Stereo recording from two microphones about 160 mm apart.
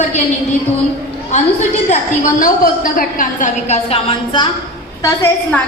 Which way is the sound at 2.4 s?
60° left (ahead or behind).